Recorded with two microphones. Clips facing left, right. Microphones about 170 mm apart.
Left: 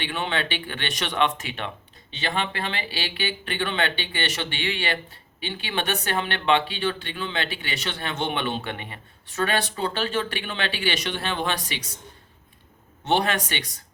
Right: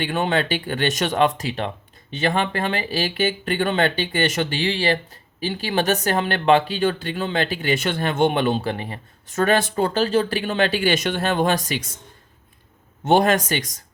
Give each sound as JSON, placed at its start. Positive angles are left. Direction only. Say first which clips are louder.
{"t": 0.0, "sound": "speech", "louder": "right 6 dB", "side_deg": -45}
{"t": 13.1, "sound": "speech", "louder": "right 6 dB", "side_deg": -45}